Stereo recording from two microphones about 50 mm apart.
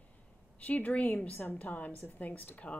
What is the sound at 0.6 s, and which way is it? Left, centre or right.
Speech, left.